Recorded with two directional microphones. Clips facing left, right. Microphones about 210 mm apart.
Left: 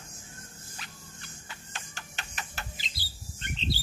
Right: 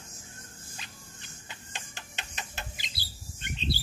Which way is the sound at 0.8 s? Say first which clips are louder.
Left 3 dB; 20° right (ahead or behind).